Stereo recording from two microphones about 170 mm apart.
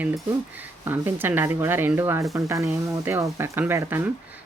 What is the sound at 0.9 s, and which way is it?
Speech, 10° right (ahead or behind).